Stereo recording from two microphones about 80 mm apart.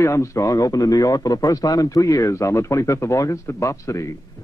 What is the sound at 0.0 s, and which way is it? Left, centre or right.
A man's voice, left.